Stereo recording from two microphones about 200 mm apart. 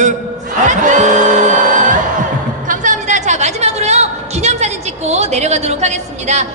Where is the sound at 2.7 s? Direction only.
40° right (ahead or behind).